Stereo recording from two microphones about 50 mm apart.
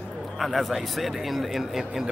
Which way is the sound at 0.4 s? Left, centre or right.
Centre.